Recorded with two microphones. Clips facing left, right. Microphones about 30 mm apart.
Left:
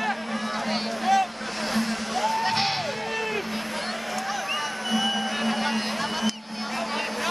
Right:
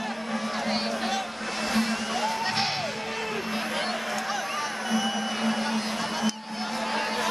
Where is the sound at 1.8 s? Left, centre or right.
Centre.